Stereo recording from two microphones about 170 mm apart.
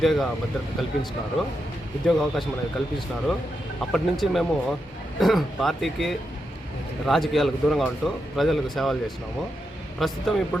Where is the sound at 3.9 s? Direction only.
Centre (ahead or behind).